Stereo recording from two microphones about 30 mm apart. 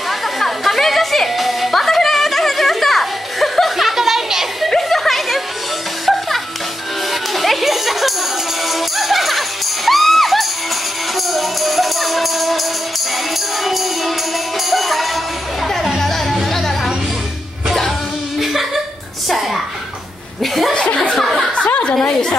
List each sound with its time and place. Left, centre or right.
0.4 s music: centre
1.3 s music: centre
4.6 s a sound: centre
6.1 s music: centre
13.7 s music: centre
18.4 s chuckle: centre
19.2 s music: centre
20.7 s chuckle: left
21.2 s chuckle: centre